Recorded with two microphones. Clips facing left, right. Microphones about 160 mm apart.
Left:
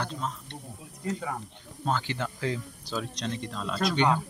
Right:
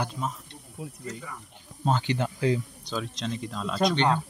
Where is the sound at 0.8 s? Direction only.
75° right (ahead or behind).